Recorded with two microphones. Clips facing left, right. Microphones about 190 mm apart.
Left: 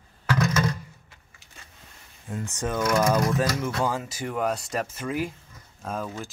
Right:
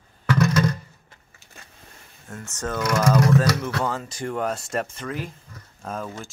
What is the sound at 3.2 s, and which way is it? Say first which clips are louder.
Speech: right 4 dB; 75° right (ahead or behind).